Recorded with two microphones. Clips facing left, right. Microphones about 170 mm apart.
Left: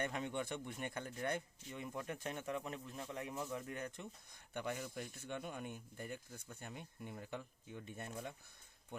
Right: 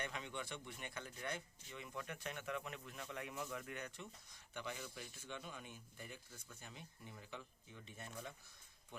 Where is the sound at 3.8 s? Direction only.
50° left (ahead or behind).